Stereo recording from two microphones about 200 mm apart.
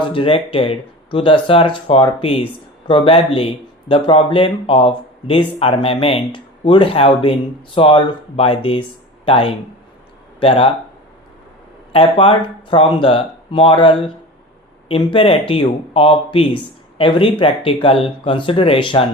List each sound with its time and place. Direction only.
0.0 s speech: 25° left (ahead or behind)
11.9 s speech: 25° left (ahead or behind)